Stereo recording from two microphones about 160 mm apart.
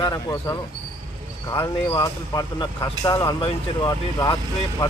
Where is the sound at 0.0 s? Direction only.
25° left (ahead or behind).